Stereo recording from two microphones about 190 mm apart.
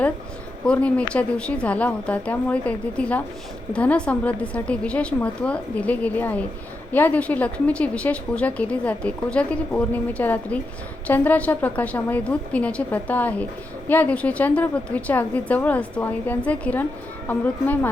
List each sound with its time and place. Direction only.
0.6 s a woman's voice: 5° left (ahead or behind)